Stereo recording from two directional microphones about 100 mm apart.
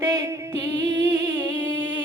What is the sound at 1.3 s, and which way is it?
Humming, 20° right (ahead or behind).